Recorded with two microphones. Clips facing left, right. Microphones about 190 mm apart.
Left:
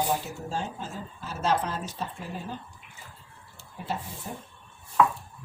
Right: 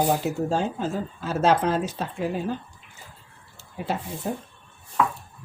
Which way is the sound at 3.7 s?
85° right.